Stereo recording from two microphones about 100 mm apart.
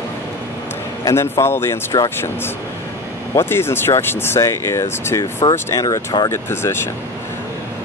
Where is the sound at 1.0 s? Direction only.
30° left (ahead or behind).